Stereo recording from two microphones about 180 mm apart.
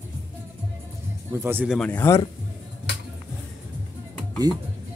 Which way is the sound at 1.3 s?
10° right (ahead or behind).